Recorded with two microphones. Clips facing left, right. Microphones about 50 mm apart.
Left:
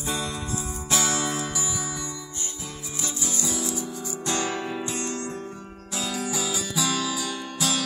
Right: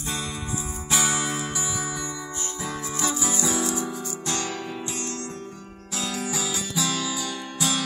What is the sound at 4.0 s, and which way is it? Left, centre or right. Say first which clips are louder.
Music: left 2 dB; centre.